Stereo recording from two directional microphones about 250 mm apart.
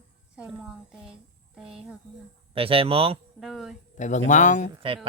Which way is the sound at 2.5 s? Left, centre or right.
Right.